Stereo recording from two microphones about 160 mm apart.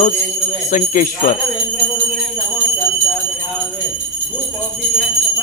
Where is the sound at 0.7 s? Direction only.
55° left (ahead or behind).